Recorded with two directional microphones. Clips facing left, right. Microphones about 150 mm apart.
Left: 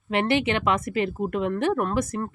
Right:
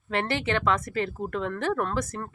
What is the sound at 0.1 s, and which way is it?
Speech, 20° left (ahead or behind).